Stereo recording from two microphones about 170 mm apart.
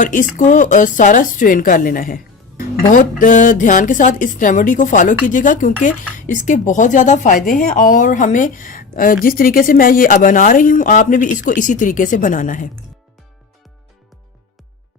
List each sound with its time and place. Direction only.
0.0 s speech: 50° left (ahead or behind)